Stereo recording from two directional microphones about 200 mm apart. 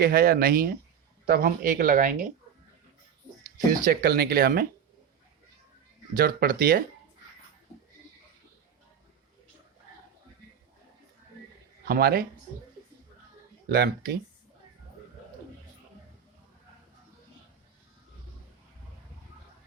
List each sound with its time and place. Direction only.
0.0 s speech: 50° right (ahead or behind)
3.7 s speech: 50° right (ahead or behind)
6.1 s speech: 45° right (ahead or behind)
11.9 s speech: 50° right (ahead or behind)
13.7 s speech: 50° right (ahead or behind)